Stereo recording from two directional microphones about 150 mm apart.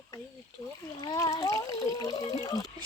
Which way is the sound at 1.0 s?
25° left (ahead or behind).